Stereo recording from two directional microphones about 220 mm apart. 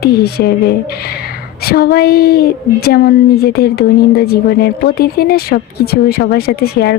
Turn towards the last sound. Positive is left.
turn(degrees=45)  # may be behind; listen again after turning